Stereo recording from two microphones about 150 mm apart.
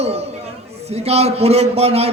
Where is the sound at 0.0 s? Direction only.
45° right (ahead or behind).